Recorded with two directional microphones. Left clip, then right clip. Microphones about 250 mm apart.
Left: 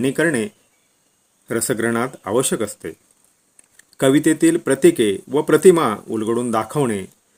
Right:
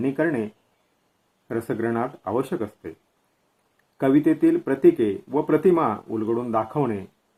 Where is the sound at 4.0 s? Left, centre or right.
Left.